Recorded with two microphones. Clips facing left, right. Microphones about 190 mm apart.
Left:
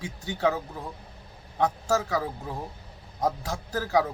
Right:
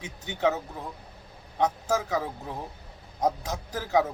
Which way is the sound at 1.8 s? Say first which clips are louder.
Left 1 dB; 20° right (ahead or behind).